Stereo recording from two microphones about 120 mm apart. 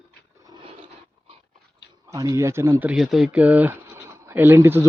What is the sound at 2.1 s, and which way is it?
Speech, 25° right (ahead or behind).